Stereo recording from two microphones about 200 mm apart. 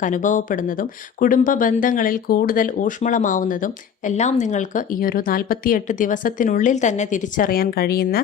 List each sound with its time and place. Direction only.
0.0 s speech: 40° left (ahead or behind)